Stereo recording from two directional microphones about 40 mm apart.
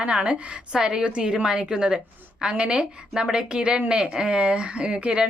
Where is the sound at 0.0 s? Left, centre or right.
Right.